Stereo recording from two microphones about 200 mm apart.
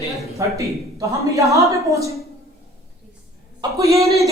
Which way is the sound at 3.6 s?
15° right (ahead or behind).